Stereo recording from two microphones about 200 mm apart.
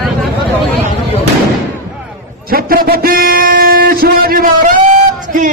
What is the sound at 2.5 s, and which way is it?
A man's voice, 45° right (ahead or behind).